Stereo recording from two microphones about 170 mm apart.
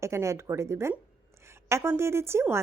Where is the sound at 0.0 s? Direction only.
15° right (ahead or behind).